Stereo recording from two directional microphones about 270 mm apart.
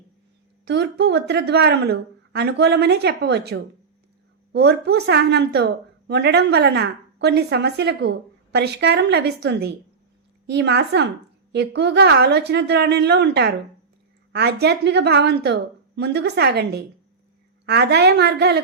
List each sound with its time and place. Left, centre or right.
0.6 s a woman's voice: right